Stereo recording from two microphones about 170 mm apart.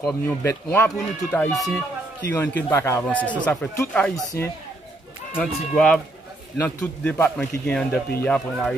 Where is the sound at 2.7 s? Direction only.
15° left (ahead or behind).